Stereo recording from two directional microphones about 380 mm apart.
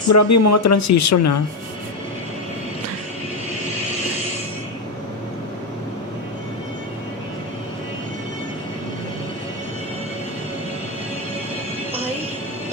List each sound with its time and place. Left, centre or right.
0.1 s speech: left